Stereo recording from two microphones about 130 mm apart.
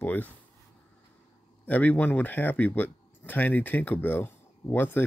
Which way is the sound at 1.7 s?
15° left (ahead or behind).